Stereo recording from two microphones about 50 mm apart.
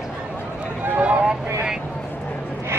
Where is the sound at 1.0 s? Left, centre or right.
Right.